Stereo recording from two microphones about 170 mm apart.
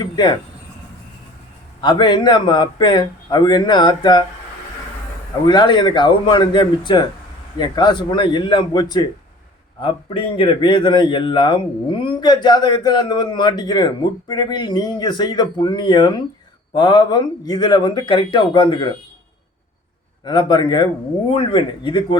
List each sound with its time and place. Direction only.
0.0 s speech: 25° left (ahead or behind)
1.8 s speech: 25° left (ahead or behind)
5.5 s speech: 25° left (ahead or behind)
20.2 s speech: 25° left (ahead or behind)